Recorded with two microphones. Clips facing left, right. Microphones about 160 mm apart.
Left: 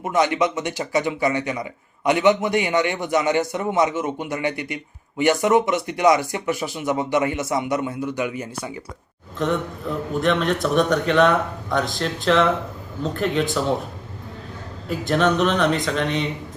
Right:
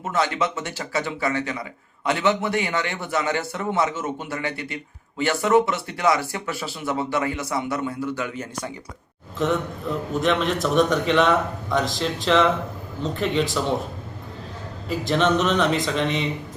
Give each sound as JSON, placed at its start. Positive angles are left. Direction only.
{"t": 0.0, "sound": "a man's voice", "side_deg": 15}
{"t": 9.4, "sound": "speech", "side_deg": 0}
{"t": 14.8, "sound": "speech", "side_deg": 0}